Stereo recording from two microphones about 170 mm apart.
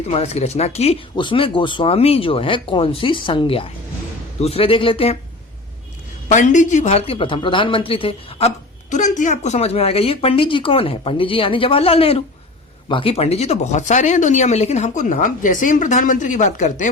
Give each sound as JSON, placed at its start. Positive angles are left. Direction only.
{"t": 0.1, "sound": "speech", "side_deg": 40}
{"t": 6.2, "sound": "speech", "side_deg": 45}